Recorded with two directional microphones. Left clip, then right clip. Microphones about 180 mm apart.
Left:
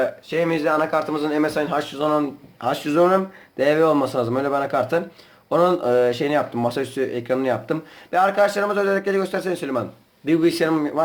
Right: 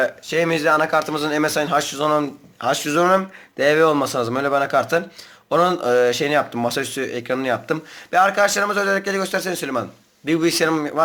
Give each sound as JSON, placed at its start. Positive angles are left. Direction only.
{"t": 0.0, "sound": "speech", "side_deg": -20}
{"t": 2.6, "sound": "speech", "side_deg": -10}